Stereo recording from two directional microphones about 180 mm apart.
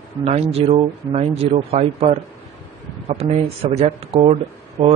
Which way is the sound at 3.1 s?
35° right (ahead or behind).